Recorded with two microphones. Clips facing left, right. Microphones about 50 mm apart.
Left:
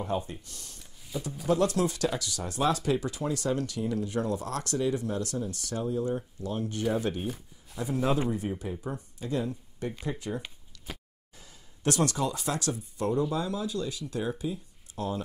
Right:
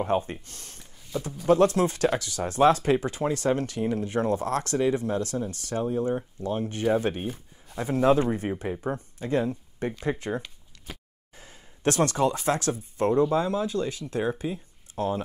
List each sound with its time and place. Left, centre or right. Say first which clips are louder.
0.0 s speech: right 6 dB; right
7.7 s speech: right 6 dB; right